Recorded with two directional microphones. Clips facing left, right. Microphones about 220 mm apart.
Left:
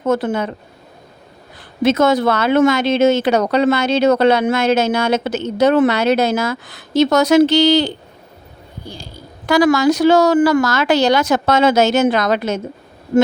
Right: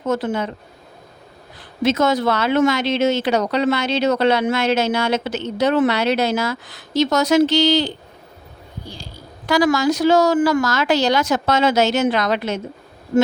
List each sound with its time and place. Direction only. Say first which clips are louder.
0.0 s speech: left 3 dB; 55° left (ahead or behind)
1.8 s speech: left 4 dB; 55° left (ahead or behind)
9.5 s speech: left 4 dB; 60° left (ahead or behind)